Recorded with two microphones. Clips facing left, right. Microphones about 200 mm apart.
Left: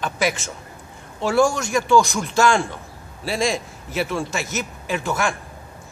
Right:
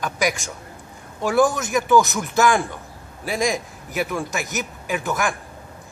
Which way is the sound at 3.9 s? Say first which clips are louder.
Left 1 dB; 15° right (ahead or behind).